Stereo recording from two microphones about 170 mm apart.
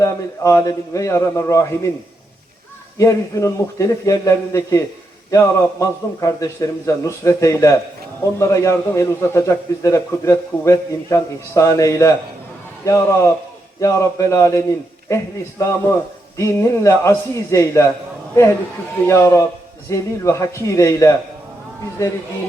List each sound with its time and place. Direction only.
0.0 s a man's voice: 20° left (ahead or behind)
3.0 s a man's voice: 20° left (ahead or behind)
19.0 s a man's voice: 15° left (ahead or behind)